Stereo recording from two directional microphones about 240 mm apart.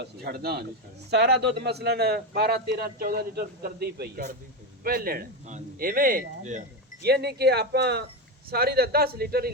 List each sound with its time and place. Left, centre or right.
0.0 s a man's voice: right